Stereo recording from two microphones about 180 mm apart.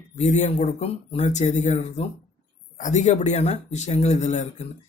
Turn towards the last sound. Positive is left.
turn(degrees=40)  # may be behind; listen again after turning